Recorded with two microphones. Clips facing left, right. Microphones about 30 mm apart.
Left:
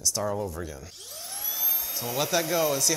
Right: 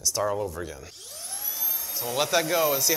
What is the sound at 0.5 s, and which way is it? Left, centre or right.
Speech, centre.